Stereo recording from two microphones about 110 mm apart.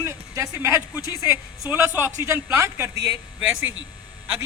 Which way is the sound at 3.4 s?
10° right (ahead or behind).